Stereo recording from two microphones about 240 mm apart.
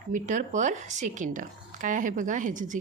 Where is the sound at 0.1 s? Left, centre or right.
Right.